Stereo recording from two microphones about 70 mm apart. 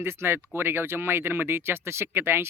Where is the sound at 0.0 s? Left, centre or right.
Right.